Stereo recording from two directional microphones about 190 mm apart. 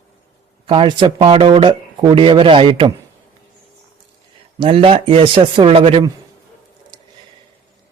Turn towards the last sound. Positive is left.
turn(degrees=-30)  # may be behind; listen again after turning